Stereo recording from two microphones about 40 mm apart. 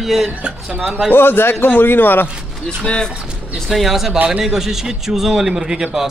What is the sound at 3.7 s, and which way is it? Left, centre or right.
A man's voice, centre.